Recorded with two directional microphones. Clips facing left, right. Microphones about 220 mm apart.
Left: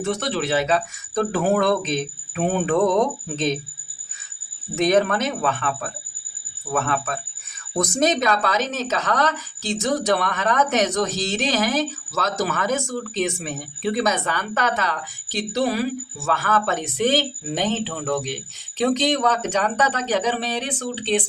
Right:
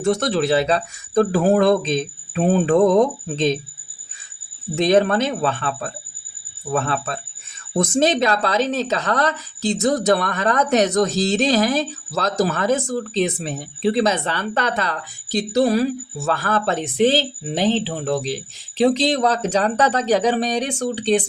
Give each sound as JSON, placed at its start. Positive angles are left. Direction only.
{"t": 0.0, "sound": "speech", "side_deg": -40}
{"t": 4.8, "sound": "speech", "side_deg": -30}